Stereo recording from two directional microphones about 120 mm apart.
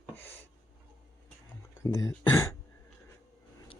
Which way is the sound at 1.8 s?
25° left (ahead or behind).